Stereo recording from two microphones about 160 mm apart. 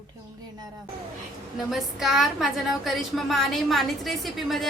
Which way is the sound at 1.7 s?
Centre (ahead or behind).